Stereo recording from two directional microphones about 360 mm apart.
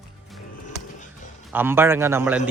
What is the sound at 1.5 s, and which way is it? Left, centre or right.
Speech, centre.